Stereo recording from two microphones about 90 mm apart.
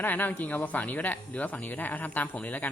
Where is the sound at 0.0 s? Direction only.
20° left (ahead or behind).